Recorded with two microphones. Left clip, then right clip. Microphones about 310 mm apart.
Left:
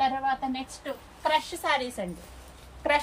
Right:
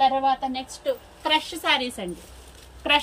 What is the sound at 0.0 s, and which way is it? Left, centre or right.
A woman's voice, left.